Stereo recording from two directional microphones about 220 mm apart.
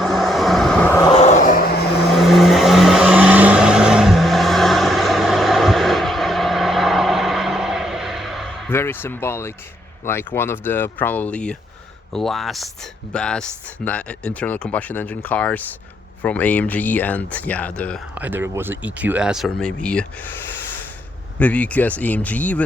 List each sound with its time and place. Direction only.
0.0 s vehicle: centre (ahead or behind)
1.1 s vehicle: 30° left (ahead or behind)
2.1 s vehicle: centre (ahead or behind)
8.7 s speech: 10° left (ahead or behind)
18.1 s speech: 10° right (ahead or behind)
21.3 s speech: 5° left (ahead or behind)